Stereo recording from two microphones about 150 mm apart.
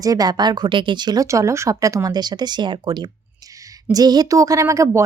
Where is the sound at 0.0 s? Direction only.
25° right (ahead or behind).